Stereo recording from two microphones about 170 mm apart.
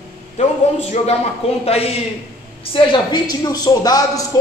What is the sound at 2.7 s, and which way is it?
A man's voice, 30° left (ahead or behind).